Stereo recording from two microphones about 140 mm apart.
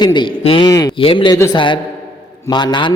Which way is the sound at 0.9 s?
40° left (ahead or behind).